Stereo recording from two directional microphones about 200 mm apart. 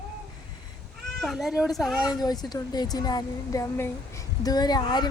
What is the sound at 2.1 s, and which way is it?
Speech, 20° left (ahead or behind).